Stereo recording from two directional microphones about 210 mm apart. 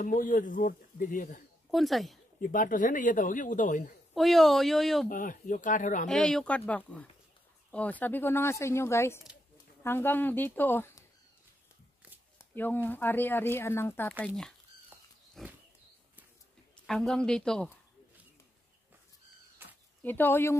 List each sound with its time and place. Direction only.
0.0 s speech: 40° left (ahead or behind)
1.7 s speech: centre (ahead or behind)
2.4 s speech: 40° left (ahead or behind)
4.1 s speech: centre (ahead or behind)
5.1 s speech: 40° left (ahead or behind)
6.0 s speech: 5° left (ahead or behind)
12.4 s speech: 10° left (ahead or behind)
15.4 s wild animals: centre (ahead or behind)
16.7 s a woman's voice: centre (ahead or behind)
19.6 s a sound: 10° right (ahead or behind)
20.0 s speech: 10° left (ahead or behind)